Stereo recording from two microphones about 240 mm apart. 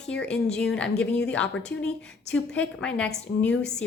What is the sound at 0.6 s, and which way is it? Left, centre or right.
Speech, centre.